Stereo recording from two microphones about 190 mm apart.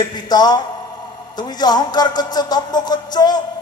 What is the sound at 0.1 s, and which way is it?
Speech, 20° left (ahead or behind).